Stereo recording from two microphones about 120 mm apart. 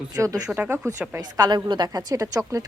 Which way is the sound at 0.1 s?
30° right (ahead or behind).